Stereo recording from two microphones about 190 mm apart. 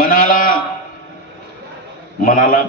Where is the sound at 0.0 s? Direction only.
50° left (ahead or behind).